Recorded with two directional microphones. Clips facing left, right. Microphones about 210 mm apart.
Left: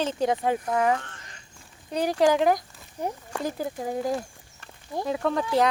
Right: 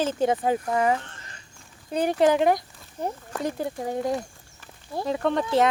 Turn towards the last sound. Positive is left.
turn(degrees=0)  # may be behind; listen again after turning